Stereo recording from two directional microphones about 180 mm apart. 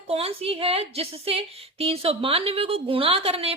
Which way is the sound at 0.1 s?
35° right (ahead or behind).